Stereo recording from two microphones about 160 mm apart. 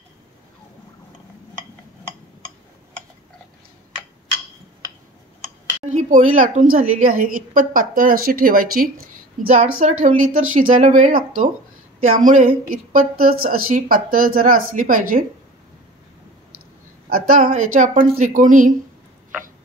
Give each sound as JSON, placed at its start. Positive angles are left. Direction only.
{"t": 5.9, "sound": "a woman's voice", "side_deg": -50}
{"t": 9.8, "sound": "a woman's voice", "side_deg": -50}
{"t": 17.1, "sound": "a woman's voice", "side_deg": -60}